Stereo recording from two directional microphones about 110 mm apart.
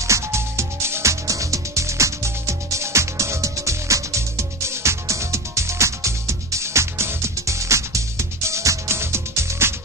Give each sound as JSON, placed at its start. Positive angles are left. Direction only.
{"t": 0.0, "sound": "music", "side_deg": -25}